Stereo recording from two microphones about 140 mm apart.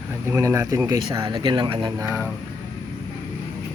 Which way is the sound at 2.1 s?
10° right (ahead or behind).